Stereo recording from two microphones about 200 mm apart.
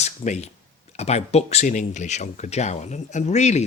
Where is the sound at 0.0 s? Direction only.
35° left (ahead or behind).